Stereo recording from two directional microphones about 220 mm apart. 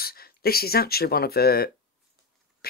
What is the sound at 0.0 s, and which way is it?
Speech, 45° left (ahead or behind).